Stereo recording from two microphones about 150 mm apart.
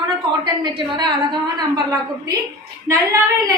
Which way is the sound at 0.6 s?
30° right (ahead or behind).